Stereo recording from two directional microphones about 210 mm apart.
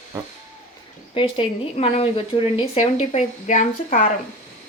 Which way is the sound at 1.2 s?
25° left (ahead or behind).